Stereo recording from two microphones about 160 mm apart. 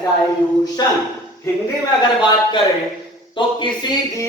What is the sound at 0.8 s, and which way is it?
Speech, 25° left (ahead or behind).